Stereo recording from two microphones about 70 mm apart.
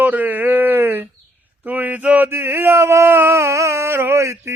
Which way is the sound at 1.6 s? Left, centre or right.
Right.